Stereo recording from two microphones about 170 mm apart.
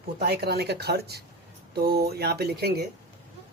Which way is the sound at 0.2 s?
70° right (ahead or behind).